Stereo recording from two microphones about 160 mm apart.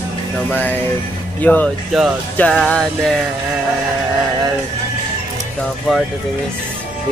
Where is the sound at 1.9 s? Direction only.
Centre (ahead or behind).